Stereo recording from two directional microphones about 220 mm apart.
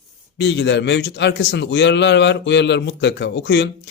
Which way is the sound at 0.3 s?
50° left (ahead or behind).